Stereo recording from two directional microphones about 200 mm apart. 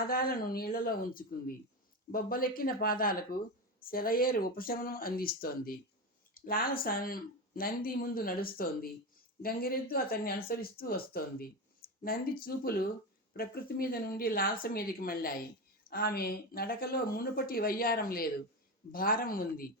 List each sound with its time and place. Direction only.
0.0 s speech: 45° left (ahead or behind)